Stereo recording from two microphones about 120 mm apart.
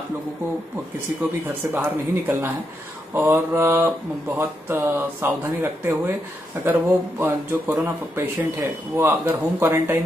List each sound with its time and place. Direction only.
1.7 s speech: 15° right (ahead or behind)